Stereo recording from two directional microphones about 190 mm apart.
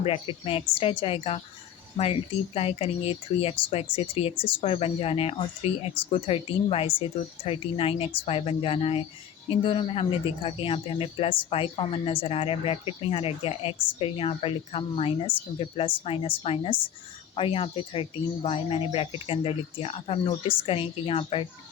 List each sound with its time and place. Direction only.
0.0 s speech: 30° left (ahead or behind)
2.6 s speech: 30° left (ahead or behind)